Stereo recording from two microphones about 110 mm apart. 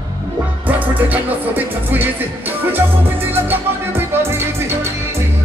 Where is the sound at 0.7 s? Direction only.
15° right (ahead or behind).